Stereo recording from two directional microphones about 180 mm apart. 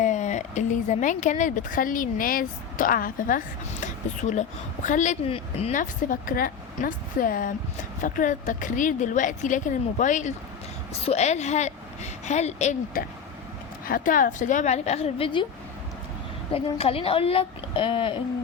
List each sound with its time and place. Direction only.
0.0 s a woman's voice: 40° left (ahead or behind)
12.9 s speech: 50° left (ahead or behind); by 15.4 s 30° left (ahead or behind)
16.5 s a woman's voice: 35° left (ahead or behind)